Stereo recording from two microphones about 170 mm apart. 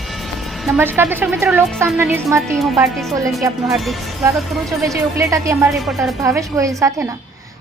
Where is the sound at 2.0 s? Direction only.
15° right (ahead or behind).